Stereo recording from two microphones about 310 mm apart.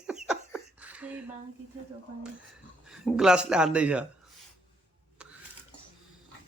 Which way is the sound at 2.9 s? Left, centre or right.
Centre.